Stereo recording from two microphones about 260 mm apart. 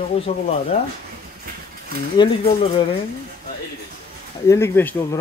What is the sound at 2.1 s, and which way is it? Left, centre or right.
Speech, centre.